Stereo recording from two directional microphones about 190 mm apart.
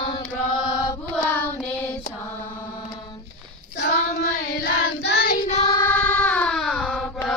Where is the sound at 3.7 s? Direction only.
60° left (ahead or behind).